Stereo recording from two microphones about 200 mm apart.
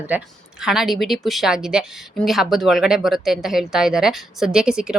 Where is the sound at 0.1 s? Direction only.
10° right (ahead or behind).